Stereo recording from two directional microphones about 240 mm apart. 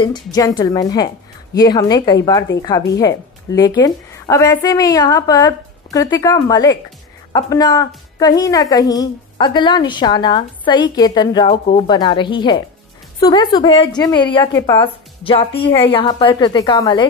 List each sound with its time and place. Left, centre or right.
0.0 s a woman's voice: centre